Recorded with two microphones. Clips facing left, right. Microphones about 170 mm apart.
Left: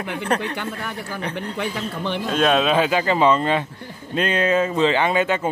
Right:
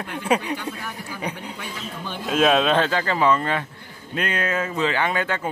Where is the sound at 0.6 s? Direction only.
70° left (ahead or behind).